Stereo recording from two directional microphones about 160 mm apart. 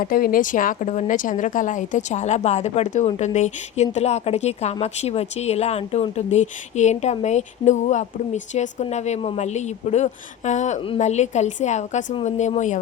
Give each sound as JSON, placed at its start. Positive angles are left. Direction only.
{"t": 0.0, "sound": "a woman's voice", "side_deg": 60}
{"t": 10.8, "sound": "a woman's voice", "side_deg": 35}